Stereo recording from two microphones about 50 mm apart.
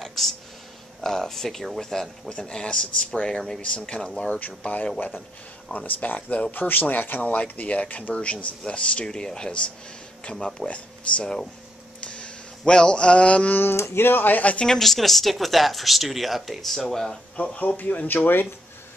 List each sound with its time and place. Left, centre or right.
0.0 s a sound: centre
1.0 s a man's voice: centre
4.4 s speech: left
5.9 s a man's voice: left; by 10.7 s centre
12.0 s a sound: left
13.7 s speech: left
14.7 s speech: centre
17.4 s speech: left